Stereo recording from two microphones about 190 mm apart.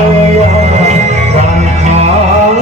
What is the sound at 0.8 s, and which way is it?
Music, 35° right (ahead or behind).